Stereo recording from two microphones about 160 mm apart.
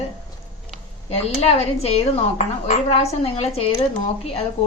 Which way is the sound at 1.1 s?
40° left (ahead or behind).